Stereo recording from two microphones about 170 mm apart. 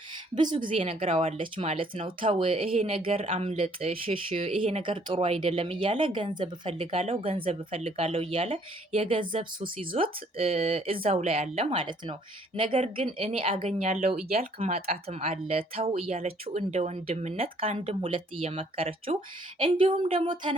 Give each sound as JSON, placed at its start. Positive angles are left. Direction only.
{"t": 0.3, "sound": "a woman's voice", "side_deg": -25}